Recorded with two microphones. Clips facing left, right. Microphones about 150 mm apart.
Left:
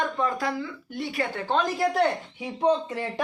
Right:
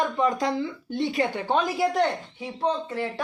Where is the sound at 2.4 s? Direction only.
15° left (ahead or behind).